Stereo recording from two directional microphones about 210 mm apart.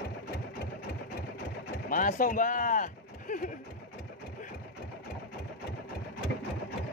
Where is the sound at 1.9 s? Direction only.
40° left (ahead or behind).